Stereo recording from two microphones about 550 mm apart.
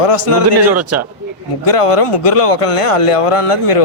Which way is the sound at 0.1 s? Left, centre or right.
Left.